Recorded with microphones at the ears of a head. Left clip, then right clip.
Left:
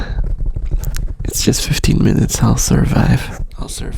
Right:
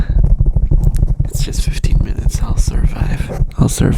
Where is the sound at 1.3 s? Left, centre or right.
Left.